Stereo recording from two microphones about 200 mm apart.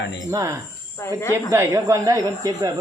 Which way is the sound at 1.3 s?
15° right (ahead or behind).